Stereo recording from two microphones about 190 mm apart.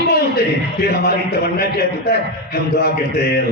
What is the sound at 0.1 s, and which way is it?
A man's voice, 55° left (ahead or behind).